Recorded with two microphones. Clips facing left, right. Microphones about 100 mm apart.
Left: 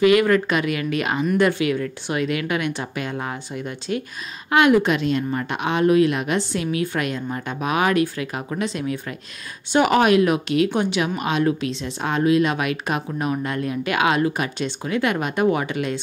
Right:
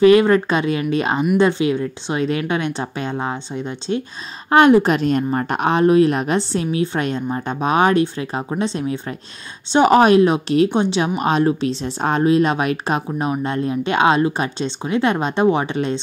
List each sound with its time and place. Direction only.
0.0 s a woman's voice: 30° right (ahead or behind)